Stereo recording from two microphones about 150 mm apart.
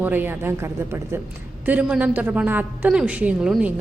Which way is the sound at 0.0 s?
15° right (ahead or behind).